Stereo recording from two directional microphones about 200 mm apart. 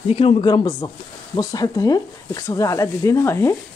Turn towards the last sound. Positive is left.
turn(degrees=15)  # may be behind; listen again after turning